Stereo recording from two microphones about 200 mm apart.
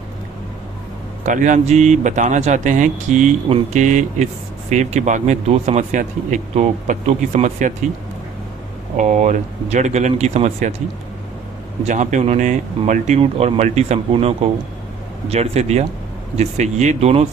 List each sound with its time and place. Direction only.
1.2 s speech: 40° right (ahead or behind)
9.0 s speech: 35° right (ahead or behind)
11.9 s speech: 40° right (ahead or behind)